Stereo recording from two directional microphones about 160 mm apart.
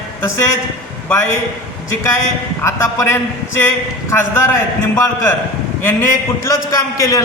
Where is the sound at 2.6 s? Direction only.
15° left (ahead or behind).